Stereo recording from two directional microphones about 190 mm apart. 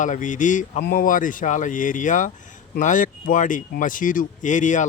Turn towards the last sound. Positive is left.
turn(degrees=40)  # may be behind; listen again after turning